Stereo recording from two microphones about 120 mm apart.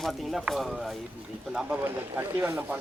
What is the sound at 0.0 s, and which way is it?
Speech, centre (ahead or behind).